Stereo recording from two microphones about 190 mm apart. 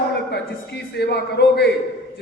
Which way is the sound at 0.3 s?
60° left (ahead or behind).